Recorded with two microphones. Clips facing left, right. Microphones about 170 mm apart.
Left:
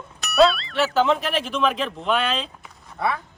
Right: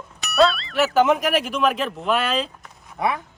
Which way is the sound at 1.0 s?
15° right (ahead or behind).